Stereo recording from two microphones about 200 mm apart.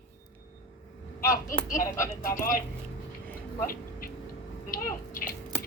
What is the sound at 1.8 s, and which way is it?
Speech, 15° left (ahead or behind).